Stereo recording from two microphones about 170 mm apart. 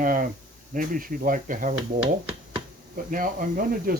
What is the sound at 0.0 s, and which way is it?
Speech, 55° right (ahead or behind).